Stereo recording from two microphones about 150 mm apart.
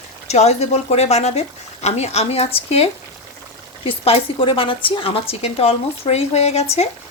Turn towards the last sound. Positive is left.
turn(degrees=45)  # may be behind; listen again after turning